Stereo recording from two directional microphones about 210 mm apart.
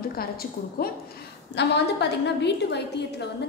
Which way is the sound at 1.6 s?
55° left (ahead or behind).